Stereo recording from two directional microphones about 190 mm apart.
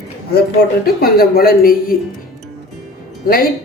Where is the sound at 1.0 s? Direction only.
50° left (ahead or behind).